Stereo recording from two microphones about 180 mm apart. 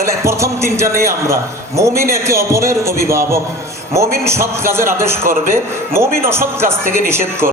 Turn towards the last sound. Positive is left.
turn(degrees=-15)  # may be behind; listen again after turning